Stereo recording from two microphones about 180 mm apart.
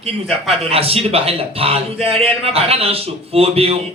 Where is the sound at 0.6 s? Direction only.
35° right (ahead or behind).